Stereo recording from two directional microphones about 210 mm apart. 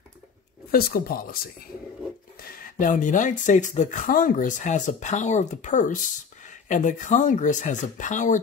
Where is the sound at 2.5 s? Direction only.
40° left (ahead or behind).